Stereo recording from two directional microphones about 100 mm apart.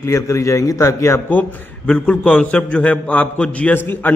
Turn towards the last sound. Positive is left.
turn(degrees=20)  # may be behind; listen again after turning